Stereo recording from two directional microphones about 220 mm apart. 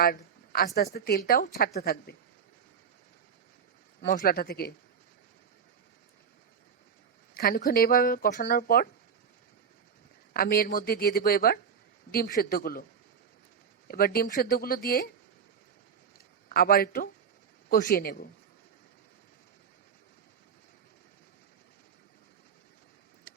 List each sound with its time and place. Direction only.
0.0 s a woman's voice: 40° left (ahead or behind)
4.0 s speech: 40° left (ahead or behind)
7.3 s speech: 40° left (ahead or behind)
10.3 s a woman's voice: 45° left (ahead or behind)
13.8 s a woman's voice: 40° left (ahead or behind)
16.5 s speech: 40° left (ahead or behind)